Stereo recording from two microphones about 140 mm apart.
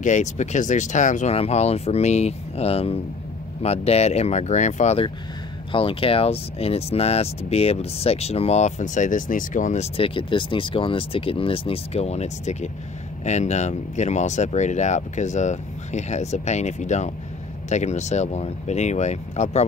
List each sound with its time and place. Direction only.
0.0 s speech: 55° left (ahead or behind)
1.3 s speech: 50° left (ahead or behind)
5.7 s speech: 40° left (ahead or behind); by 9.8 s 65° left (ahead or behind)
9.9 s speech: 40° left (ahead or behind); by 19.6 s 55° left (ahead or behind)